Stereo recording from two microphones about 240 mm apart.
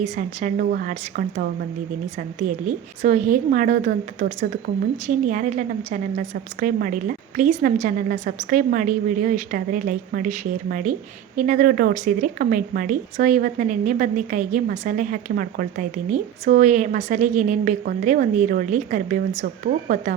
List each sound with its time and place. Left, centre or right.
0.0 s a woman's voice: right